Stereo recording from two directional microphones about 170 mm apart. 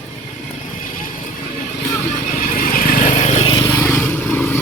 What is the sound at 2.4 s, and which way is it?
Vehicle, 55° left (ahead or behind).